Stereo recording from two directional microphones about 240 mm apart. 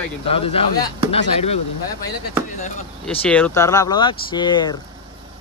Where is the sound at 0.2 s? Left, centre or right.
Left.